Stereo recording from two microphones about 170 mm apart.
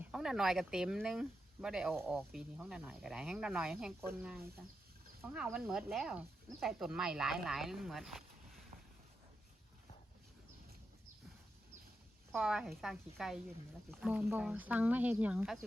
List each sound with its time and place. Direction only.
0.0 s speech: 5° right (ahead or behind)
12.3 s speech: 5° right (ahead or behind)